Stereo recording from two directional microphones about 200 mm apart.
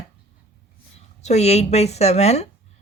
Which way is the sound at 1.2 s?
35° left (ahead or behind).